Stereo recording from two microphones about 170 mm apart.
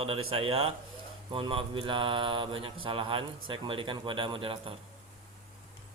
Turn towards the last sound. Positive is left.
turn(degrees=-30)  # may be behind; listen again after turning